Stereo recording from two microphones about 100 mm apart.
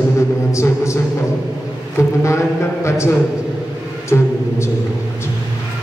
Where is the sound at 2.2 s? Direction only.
30° left (ahead or behind).